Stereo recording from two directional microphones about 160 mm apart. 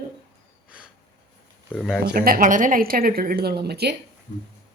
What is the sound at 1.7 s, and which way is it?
Speech, 5° left (ahead or behind).